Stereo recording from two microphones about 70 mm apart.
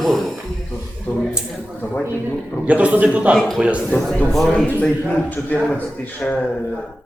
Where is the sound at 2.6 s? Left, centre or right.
Right.